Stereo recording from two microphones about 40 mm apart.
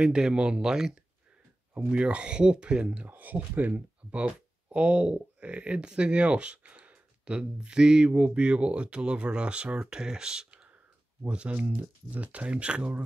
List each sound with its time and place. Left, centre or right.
0.0 s speech: centre
1.9 s speech: right
3.1 s speech: right; by 10.7 s centre
11.2 s speech: right